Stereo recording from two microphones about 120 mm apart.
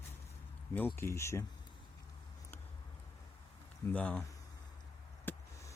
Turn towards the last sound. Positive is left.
turn(degrees=15)  # may be behind; listen again after turning